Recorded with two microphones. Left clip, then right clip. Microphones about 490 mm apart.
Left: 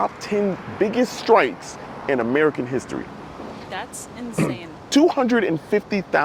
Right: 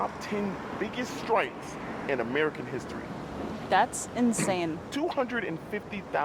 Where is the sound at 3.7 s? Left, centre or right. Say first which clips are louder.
Right 8 dB; right.